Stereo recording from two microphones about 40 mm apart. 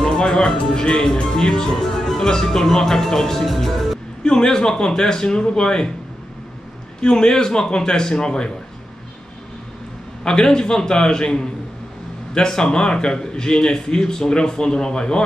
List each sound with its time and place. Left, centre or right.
0.0 s speech: centre
4.2 s speech: centre
7.0 s speech: left
10.2 s speech: centre